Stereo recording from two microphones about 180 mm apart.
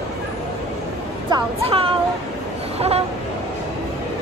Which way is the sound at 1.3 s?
30° right (ahead or behind).